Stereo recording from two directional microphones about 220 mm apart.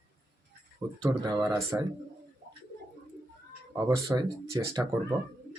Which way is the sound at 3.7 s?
15° right (ahead or behind).